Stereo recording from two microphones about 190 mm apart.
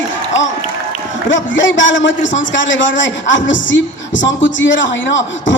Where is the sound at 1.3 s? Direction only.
75° left (ahead or behind).